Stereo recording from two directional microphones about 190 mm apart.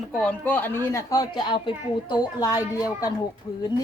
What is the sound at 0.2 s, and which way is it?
Speech, 10° left (ahead or behind).